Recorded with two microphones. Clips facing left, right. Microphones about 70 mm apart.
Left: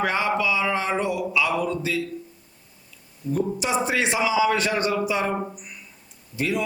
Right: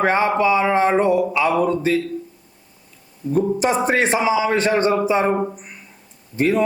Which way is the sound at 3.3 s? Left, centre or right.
Right.